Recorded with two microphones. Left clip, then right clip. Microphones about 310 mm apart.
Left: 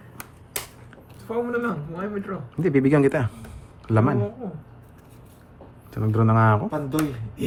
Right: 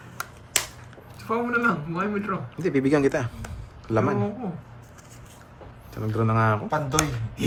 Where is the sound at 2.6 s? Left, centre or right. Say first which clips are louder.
Left 3 dB; left.